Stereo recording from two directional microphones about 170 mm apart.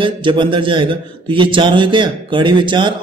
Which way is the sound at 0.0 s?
30° right (ahead or behind).